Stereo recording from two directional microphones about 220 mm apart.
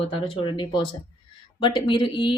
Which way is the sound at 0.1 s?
20° left (ahead or behind).